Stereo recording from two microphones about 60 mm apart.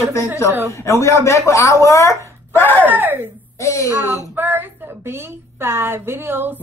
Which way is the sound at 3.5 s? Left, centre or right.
Left.